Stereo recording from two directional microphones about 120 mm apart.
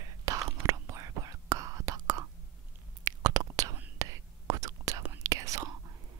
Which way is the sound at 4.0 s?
25° right (ahead or behind).